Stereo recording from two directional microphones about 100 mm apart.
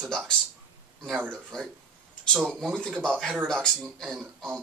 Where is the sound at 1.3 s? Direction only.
5° left (ahead or behind).